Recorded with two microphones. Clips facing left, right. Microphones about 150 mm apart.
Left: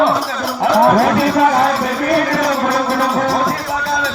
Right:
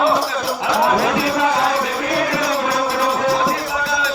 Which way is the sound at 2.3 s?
45° left (ahead or behind).